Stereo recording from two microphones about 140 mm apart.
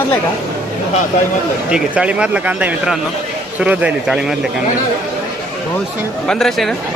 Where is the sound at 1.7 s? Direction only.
10° right (ahead or behind).